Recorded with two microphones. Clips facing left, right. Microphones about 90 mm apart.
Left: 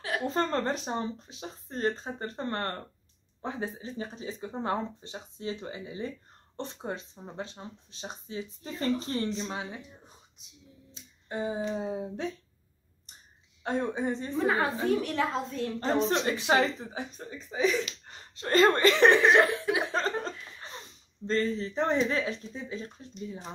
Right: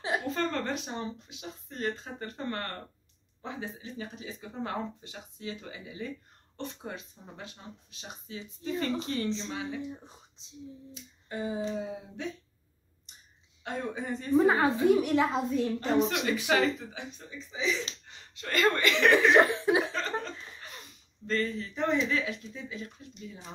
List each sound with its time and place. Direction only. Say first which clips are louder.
0.3 s speech: left 3 dB; 35° left (ahead or behind)
10.4 s chuckle: right 3 dB; 30° right (ahead or behind)
10.9 s speech: left 2 dB; 25° left (ahead or behind)
13.7 s speech: left 5 dB; 30° left (ahead or behind)
14.3 s chuckle: right 6 dB; 25° right (ahead or behind)
14.9 s a woman's voice: right 3 dB; 15° right (ahead or behind)
15.8 s speech: left 5 dB; 35° left (ahead or behind)
18.0 s speech: left 4 dB; 40° left (ahead or behind)
19.3 s chuckle: right 1 dB; 25° right (ahead or behind)
19.9 s a sound: left 3 dB; 40° left (ahead or behind)
21.3 s speech: left 3 dB; 30° left (ahead or behind)